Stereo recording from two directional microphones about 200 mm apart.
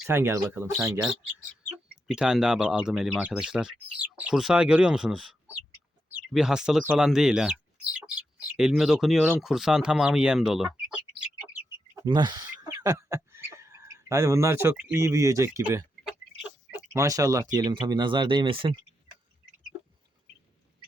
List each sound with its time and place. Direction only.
0.0 s speech: 10° right (ahead or behind)
1.6 s speech: centre (ahead or behind)
11.9 s speech: 20° right (ahead or behind)